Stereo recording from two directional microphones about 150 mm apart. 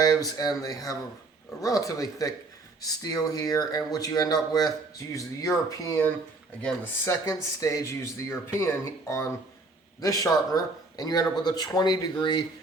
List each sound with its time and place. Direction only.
0.3 s speech: 25° left (ahead or behind)